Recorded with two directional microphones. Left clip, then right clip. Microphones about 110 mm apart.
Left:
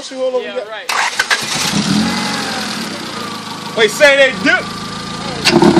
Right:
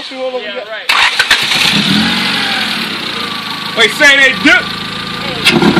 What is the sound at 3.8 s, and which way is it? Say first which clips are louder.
Speech: right 2 dB; 30° left (ahead or behind).